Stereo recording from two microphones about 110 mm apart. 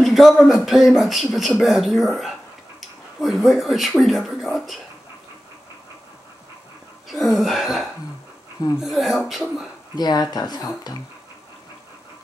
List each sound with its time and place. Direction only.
0.0 s speech: centre (ahead or behind)
7.1 s speech: centre (ahead or behind)
9.9 s speech: 40° left (ahead or behind)